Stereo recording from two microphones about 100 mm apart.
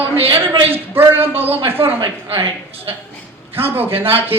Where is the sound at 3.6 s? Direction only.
70° right (ahead or behind).